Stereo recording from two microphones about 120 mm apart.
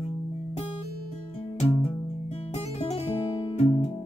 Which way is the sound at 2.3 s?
60° left (ahead or behind).